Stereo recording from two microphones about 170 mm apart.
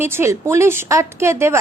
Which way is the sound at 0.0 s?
15° right (ahead or behind).